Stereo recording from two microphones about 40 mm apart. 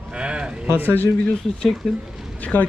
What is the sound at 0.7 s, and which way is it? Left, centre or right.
Speech, right.